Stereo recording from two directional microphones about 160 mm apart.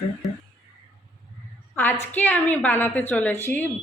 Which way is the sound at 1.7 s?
15° left (ahead or behind).